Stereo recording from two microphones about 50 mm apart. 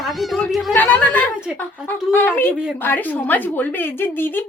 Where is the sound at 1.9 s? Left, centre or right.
Left.